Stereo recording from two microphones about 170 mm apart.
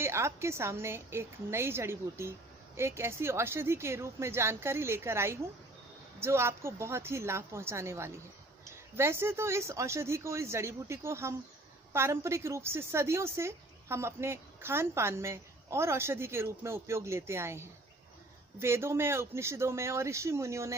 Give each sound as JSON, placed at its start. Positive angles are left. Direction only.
{"t": 0.0, "sound": "a woman's voice", "side_deg": -15}